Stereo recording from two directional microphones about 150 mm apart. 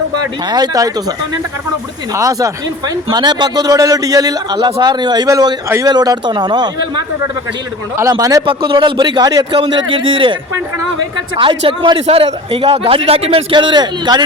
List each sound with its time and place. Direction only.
0.4 s a man's voice: 25° right (ahead or behind)
2.1 s a man's voice: 20° right (ahead or behind)
8.4 s a man's voice: 35° right (ahead or behind)
11.3 s a man's voice: 35° right (ahead or behind)